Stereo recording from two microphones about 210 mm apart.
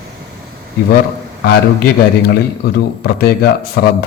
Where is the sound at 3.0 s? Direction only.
50° left (ahead or behind).